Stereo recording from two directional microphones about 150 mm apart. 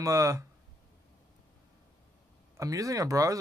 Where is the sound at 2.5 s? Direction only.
20° right (ahead or behind).